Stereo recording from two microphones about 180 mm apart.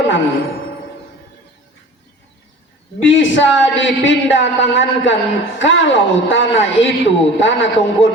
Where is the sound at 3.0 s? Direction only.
90° left.